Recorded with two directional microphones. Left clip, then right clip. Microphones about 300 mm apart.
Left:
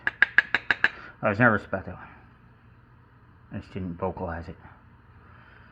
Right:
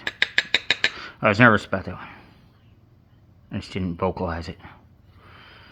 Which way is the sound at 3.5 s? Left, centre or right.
Right.